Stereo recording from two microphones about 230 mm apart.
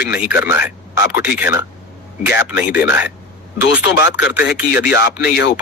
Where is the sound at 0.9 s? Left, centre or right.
Left.